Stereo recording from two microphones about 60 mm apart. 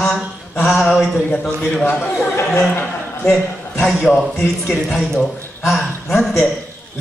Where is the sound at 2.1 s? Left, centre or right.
Left.